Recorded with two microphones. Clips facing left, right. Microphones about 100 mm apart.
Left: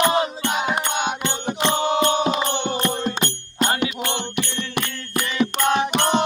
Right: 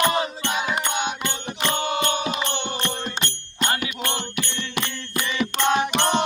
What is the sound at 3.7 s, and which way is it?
Music, 15° left (ahead or behind).